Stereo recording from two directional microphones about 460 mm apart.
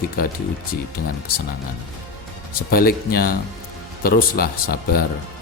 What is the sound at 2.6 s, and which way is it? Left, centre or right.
A man's voice, centre.